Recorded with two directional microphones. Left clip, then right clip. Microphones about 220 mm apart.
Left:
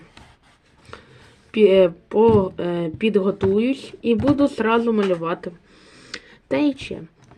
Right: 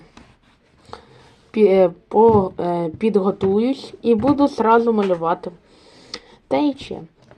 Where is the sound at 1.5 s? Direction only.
5° left (ahead or behind).